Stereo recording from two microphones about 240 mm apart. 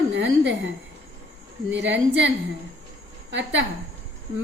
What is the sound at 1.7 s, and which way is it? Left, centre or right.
Speech, right.